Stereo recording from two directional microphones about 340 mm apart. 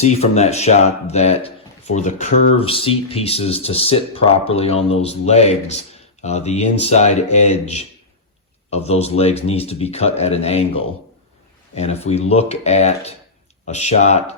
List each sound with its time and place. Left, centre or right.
0.0 s speech: centre